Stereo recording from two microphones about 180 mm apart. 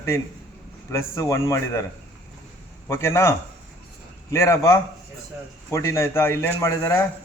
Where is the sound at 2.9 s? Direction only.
15° left (ahead or behind).